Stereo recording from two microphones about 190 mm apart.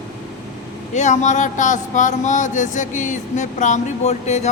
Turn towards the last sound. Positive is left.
turn(degrees=35)  # may be behind; listen again after turning